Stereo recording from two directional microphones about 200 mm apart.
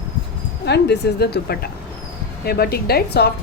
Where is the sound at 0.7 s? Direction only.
55° left (ahead or behind).